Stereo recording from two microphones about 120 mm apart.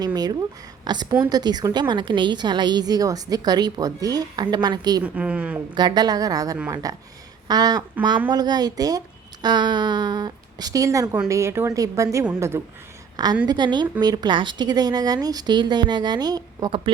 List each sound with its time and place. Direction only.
0.0 s a woman's voice: 35° right (ahead or behind)
5.0 s a woman's voice: 10° right (ahead or behind)
5.7 s a woman's voice: 35° right (ahead or behind)
13.5 s a woman's voice: 40° right (ahead or behind)